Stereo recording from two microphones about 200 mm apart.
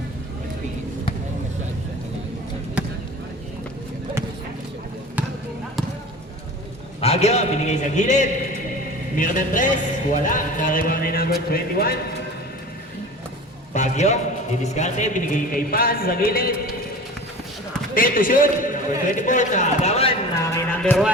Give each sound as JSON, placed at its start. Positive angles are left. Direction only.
{"t": 2.8, "sound": "basketball bounce", "side_deg": -5}
{"t": 7.0, "sound": "a man's voice", "side_deg": 30}
{"t": 13.7, "sound": "a man's voice", "side_deg": 35}
{"t": 17.9, "sound": "a man's voice", "side_deg": 45}
{"t": 20.3, "sound": "a sound", "side_deg": 10}